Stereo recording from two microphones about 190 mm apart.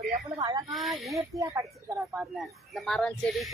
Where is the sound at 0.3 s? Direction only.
20° right (ahead or behind).